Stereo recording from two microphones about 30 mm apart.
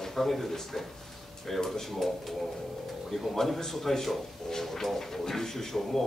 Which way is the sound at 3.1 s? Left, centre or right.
Centre.